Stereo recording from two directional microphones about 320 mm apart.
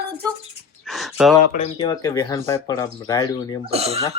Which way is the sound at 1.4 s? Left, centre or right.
Left.